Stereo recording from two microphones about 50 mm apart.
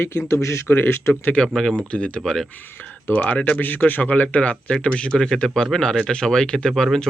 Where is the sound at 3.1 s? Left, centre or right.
Left; by 6.7 s centre.